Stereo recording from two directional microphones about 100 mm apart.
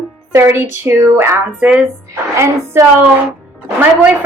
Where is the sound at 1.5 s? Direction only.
10° right (ahead or behind).